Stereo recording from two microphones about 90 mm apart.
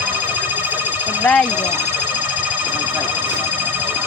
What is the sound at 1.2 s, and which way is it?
Speech, 10° left (ahead or behind).